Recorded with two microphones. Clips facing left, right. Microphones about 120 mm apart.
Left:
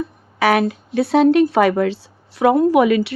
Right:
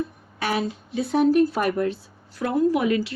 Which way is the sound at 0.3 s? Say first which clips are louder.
Left 9 dB; 75° left (ahead or behind).